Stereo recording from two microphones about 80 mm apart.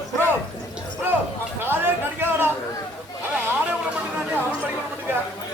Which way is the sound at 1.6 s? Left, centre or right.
Right.